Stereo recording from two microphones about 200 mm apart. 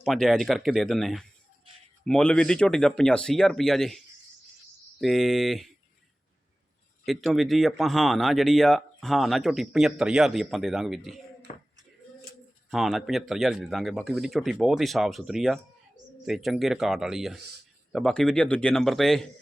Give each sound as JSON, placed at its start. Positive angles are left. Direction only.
{"t": 0.0, "sound": "speech", "side_deg": 0}
{"t": 7.0, "sound": "speech", "side_deg": 0}
{"t": 11.5, "sound": "speech", "side_deg": 35}
{"t": 12.7, "sound": "speech", "side_deg": 0}